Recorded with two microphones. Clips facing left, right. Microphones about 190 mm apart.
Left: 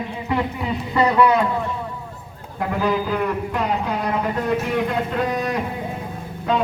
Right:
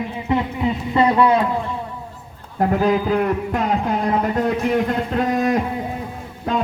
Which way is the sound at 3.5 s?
50° right (ahead or behind).